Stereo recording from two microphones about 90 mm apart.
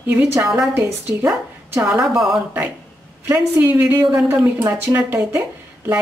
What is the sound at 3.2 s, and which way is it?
Speech, 30° right (ahead or behind).